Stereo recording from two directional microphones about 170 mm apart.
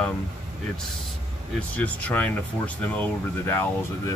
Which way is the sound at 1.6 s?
10° left (ahead or behind).